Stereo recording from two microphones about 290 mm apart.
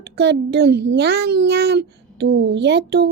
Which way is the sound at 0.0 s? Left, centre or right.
Right.